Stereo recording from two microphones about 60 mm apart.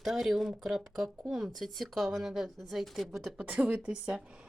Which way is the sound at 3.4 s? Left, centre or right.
Right.